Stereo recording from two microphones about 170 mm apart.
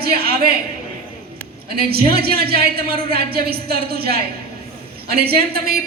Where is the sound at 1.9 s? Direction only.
65° right (ahead or behind).